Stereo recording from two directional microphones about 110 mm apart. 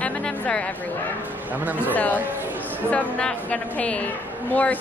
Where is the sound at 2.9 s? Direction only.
10° left (ahead or behind).